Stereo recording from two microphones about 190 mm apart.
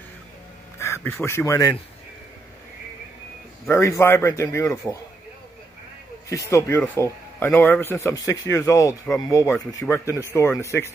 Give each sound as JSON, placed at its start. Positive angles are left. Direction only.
{"t": 0.7, "sound": "speech", "side_deg": 15}
{"t": 3.6, "sound": "speech", "side_deg": 15}
{"t": 6.2, "sound": "speech", "side_deg": 15}